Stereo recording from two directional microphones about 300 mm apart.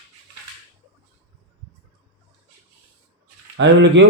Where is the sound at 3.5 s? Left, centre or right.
Right.